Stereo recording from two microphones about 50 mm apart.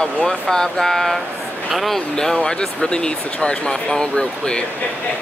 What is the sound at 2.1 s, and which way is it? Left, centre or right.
Speech, centre.